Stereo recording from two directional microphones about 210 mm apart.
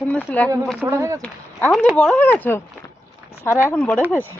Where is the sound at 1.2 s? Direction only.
5° left (ahead or behind).